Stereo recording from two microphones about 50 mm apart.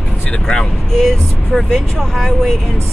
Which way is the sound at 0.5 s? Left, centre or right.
Centre.